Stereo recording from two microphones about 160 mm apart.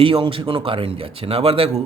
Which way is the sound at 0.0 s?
35° right (ahead or behind).